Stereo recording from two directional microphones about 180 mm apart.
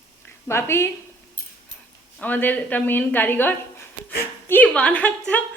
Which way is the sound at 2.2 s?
10° left (ahead or behind).